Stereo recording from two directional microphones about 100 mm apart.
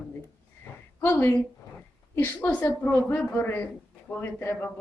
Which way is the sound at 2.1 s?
20° left (ahead or behind).